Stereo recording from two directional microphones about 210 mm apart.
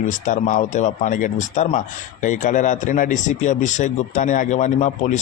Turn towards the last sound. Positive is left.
turn(degrees=35)  # may be behind; listen again after turning